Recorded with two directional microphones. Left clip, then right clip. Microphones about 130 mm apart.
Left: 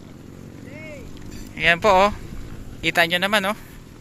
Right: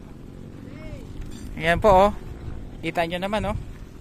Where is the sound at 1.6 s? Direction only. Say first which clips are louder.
Left 1 dB; 30° right (ahead or behind).